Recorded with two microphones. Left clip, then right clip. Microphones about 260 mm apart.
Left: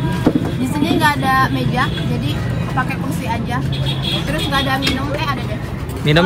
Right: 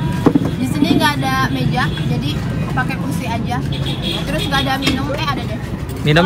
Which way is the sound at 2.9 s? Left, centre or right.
Centre.